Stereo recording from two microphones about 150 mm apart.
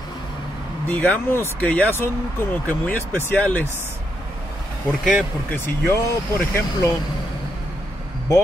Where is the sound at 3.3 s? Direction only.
15° left (ahead or behind).